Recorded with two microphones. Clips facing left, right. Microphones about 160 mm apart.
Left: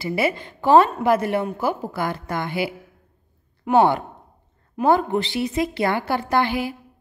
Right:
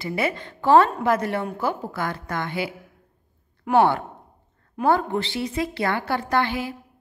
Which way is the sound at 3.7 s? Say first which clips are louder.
Left 2 dB; 15° left (ahead or behind).